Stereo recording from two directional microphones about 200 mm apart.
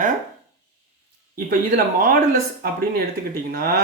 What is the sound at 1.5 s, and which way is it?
Speech, 45° right (ahead or behind).